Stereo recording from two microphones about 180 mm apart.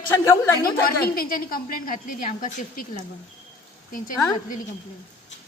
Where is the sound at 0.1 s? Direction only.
20° left (ahead or behind).